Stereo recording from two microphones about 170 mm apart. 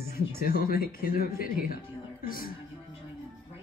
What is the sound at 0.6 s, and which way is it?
Speech, 60° left (ahead or behind).